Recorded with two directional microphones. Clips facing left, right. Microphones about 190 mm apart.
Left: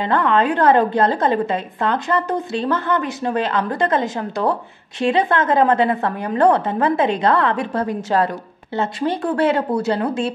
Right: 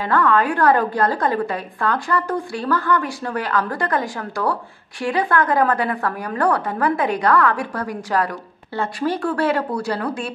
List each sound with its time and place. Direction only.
0.0 s a woman's voice: 20° left (ahead or behind)